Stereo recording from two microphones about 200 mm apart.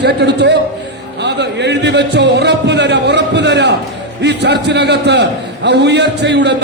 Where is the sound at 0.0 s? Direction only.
55° right (ahead or behind).